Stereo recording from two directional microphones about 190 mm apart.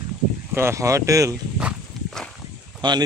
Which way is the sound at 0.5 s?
15° right (ahead or behind).